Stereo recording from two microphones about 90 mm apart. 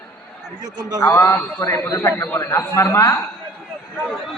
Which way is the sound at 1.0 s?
35° left (ahead or behind).